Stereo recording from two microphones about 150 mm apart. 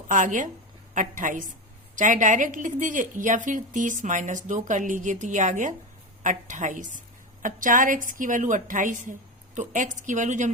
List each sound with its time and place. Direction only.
0.1 s a woman's voice: 60° right (ahead or behind)